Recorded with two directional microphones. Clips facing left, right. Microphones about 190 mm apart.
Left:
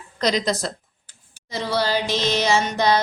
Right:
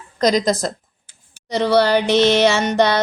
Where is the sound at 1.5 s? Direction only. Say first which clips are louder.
Right 8 dB; 70° right (ahead or behind).